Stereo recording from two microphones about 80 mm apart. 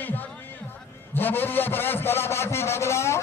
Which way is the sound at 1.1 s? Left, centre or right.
Left.